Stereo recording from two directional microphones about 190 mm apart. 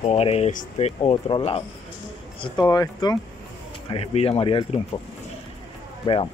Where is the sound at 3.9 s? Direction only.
30° left (ahead or behind).